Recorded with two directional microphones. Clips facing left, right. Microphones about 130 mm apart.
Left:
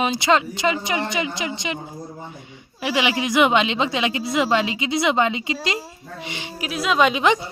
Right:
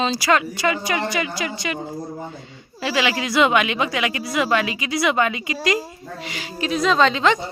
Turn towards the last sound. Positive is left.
turn(degrees=15)  # may be behind; listen again after turning